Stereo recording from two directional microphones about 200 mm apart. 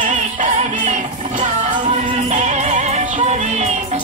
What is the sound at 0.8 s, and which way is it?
Music, 35° right (ahead or behind).